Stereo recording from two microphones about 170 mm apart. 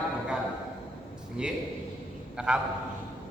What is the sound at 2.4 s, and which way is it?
Speech, 5° right (ahead or behind).